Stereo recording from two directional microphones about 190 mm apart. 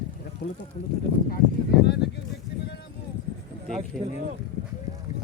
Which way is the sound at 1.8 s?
60° left (ahead or behind).